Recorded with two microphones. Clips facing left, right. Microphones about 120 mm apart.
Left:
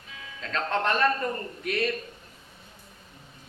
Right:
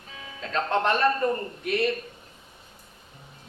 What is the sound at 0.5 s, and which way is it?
Speech, 30° right (ahead or behind).